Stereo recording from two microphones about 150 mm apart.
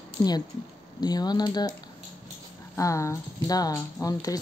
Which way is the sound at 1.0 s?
25° left (ahead or behind).